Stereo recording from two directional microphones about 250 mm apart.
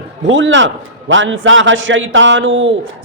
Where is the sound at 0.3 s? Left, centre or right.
Right.